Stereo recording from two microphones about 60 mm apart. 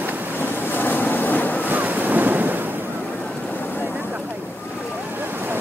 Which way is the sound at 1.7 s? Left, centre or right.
Right.